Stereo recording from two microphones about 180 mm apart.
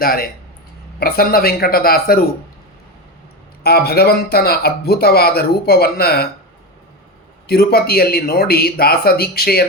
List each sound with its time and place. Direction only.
0.0 s speech: 55° left (ahead or behind)
3.6 s speech: 60° left (ahead or behind)
7.4 s speech: 60° left (ahead or behind)